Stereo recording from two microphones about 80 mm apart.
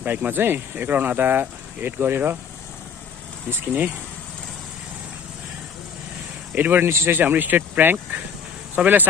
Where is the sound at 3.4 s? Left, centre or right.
Right.